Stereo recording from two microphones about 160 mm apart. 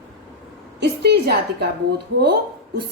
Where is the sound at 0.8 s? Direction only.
90° right.